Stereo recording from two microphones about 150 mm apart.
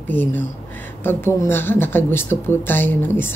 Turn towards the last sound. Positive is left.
turn(degrees=15)  # may be behind; listen again after turning